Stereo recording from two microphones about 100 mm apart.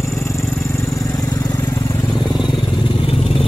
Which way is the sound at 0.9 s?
30° left (ahead or behind).